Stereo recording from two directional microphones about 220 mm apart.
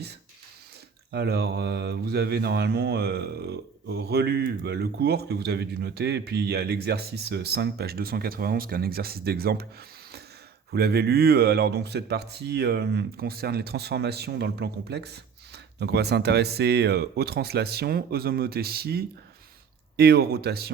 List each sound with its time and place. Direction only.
1.1 s mantra: 50° right (ahead or behind)
10.7 s mantra: 45° right (ahead or behind)